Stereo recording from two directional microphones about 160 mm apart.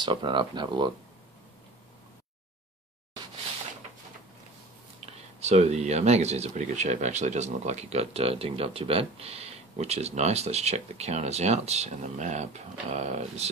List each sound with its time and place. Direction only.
0.0 s speech: 30° right (ahead or behind)
5.0 s speech: 40° right (ahead or behind)